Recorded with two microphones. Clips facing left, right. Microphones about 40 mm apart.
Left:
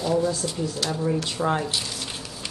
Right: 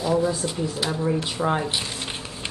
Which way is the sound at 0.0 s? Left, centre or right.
Centre.